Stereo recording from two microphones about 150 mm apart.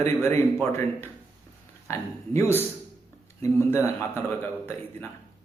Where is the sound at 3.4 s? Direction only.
15° left (ahead or behind).